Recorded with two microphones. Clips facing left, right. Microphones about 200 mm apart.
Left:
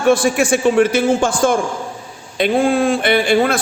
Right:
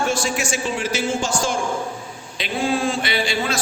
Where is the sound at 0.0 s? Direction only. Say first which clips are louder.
Left 9 dB; 55° left (ahead or behind).